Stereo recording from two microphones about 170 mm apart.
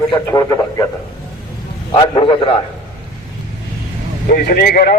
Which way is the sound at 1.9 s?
30° left (ahead or behind).